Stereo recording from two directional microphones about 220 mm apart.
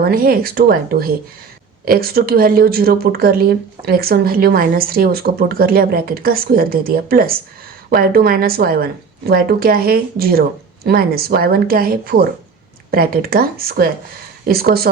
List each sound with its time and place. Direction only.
0.0 s speech: 40° right (ahead or behind)